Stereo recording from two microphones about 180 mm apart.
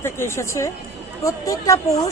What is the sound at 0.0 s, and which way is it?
Speech, 15° left (ahead or behind).